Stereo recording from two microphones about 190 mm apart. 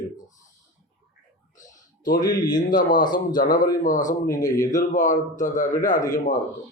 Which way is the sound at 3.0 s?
20° left (ahead or behind).